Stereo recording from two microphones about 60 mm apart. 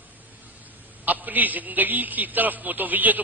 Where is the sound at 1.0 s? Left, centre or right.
Right.